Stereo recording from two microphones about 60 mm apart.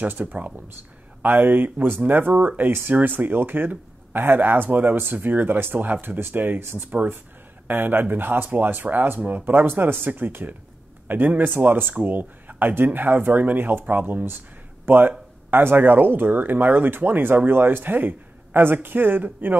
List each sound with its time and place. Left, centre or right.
0.0 s speech: right